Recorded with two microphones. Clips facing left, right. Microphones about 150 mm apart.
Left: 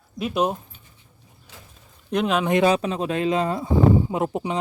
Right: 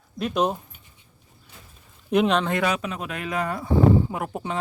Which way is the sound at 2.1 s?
Centre (ahead or behind).